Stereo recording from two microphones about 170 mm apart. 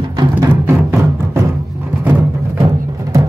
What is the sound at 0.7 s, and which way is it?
Music, 15° right (ahead or behind).